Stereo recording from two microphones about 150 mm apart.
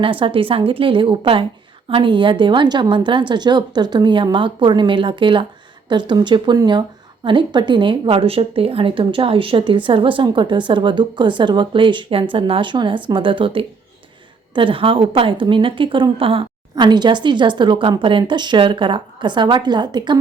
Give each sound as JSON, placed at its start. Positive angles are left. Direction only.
{"t": 0.0, "sound": "a woman's voice", "side_deg": -35}